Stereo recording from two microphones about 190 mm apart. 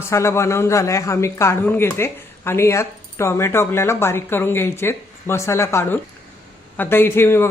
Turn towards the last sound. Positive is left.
turn(degrees=15)  # may be behind; listen again after turning